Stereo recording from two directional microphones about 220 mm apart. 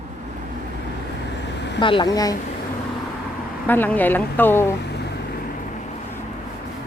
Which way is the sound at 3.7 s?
10° left (ahead or behind).